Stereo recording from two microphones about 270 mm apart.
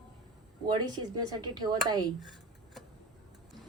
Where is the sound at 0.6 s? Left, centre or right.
Centre.